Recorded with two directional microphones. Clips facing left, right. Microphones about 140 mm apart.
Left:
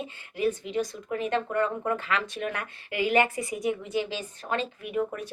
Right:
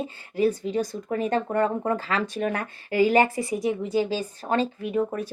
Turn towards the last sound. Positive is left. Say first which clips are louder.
# right 4 dB
turn(degrees=-35)  # may be behind; listen again after turning